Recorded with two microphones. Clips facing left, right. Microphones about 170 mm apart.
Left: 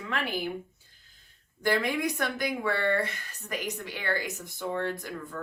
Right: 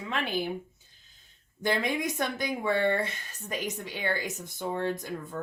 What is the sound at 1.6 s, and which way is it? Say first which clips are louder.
Speech: left 1 dB; 20° right (ahead or behind).